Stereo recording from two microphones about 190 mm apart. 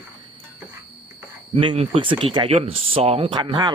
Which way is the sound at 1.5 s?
25° right (ahead or behind).